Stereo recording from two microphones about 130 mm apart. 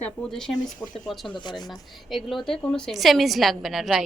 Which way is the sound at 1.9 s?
Centre (ahead or behind).